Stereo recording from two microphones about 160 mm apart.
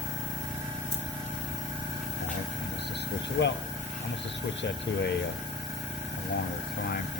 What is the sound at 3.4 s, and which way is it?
Speech, 90° left.